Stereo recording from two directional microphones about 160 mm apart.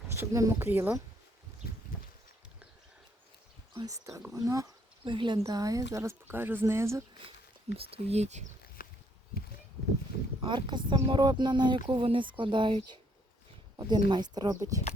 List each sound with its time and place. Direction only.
0.1 s speech: 20° right (ahead or behind)
3.8 s speech: 20° right (ahead or behind)
7.8 s speech: 35° right (ahead or behind)
8.8 s a sound: 65° left (ahead or behind)
10.4 s speech: 30° right (ahead or behind)